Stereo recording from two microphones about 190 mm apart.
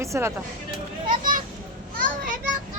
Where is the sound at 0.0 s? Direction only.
15° right (ahead or behind).